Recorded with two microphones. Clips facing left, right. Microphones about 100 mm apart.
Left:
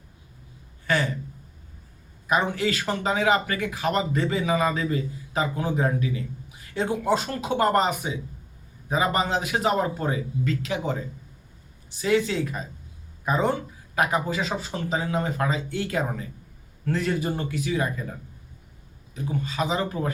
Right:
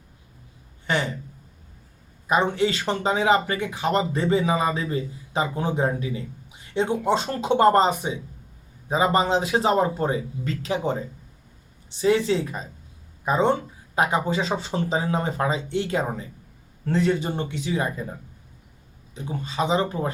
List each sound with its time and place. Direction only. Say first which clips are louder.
0.9 s speech: even; 20° right (ahead or behind)
2.2 s a man's voice: right 2 dB; 25° right (ahead or behind)
19.1 s a man's voice: even; 25° right (ahead or behind)